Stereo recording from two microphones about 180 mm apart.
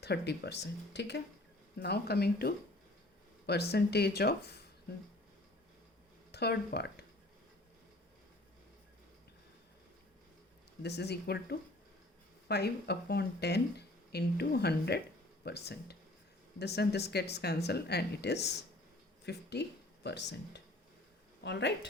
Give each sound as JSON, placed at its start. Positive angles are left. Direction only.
{"t": 0.0, "sound": "speech", "side_deg": 65}
{"t": 6.3, "sound": "speech", "side_deg": 65}
{"t": 10.8, "sound": "speech", "side_deg": 65}